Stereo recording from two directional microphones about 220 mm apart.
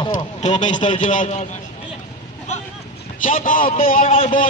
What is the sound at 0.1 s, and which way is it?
A man's voice, 35° left (ahead or behind).